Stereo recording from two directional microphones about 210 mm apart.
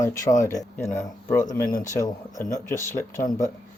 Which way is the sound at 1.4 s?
15° left (ahead or behind).